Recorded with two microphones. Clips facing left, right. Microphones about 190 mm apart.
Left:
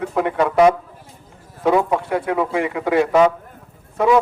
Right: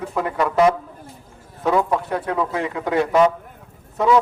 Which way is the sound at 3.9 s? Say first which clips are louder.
Left 1 dB; 20° left (ahead or behind).